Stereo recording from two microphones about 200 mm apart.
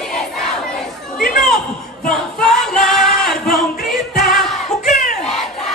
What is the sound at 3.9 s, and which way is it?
Music, centre (ahead or behind).